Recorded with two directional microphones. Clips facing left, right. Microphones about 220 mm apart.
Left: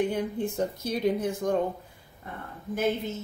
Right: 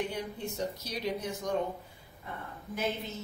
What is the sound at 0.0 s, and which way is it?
Speech, 50° left (ahead or behind).